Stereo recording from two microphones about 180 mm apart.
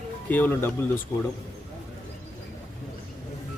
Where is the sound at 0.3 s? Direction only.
10° left (ahead or behind).